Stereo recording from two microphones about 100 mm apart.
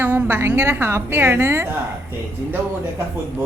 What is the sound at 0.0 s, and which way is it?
A woman's voice, 20° right (ahead or behind).